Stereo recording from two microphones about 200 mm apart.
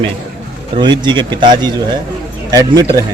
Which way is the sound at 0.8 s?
25° right (ahead or behind).